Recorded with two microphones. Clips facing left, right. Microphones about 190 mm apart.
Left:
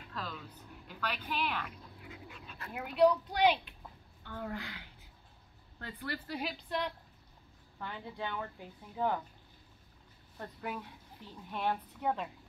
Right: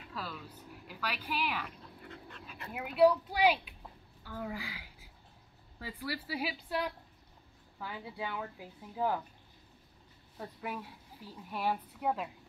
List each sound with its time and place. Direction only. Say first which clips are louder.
0.1 s speech: even; 5° right (ahead or behind)
2.0 s dog: even; 5° left (ahead or behind)
2.7 s a woman's voice: right 1 dB; 5° right (ahead or behind)
10.3 s speech: even; 5° right (ahead or behind)